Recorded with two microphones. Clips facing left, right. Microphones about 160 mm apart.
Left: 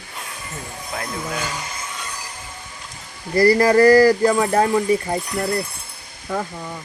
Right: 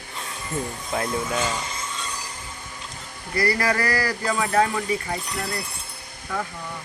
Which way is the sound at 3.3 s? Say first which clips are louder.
Left 10 dB; 30° left (ahead or behind).